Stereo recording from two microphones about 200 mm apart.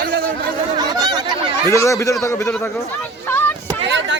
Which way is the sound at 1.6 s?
15° left (ahead or behind).